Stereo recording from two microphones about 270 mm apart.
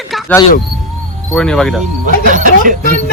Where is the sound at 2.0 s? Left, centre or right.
Right.